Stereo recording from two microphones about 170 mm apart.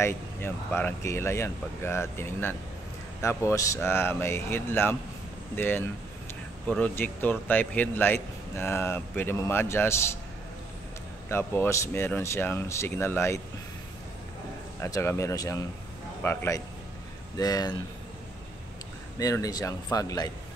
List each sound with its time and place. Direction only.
0.0 s speech: 10° left (ahead or behind)
11.2 s speech: 15° left (ahead or behind)
14.8 s speech: 15° left (ahead or behind)
19.1 s speech: 20° left (ahead or behind)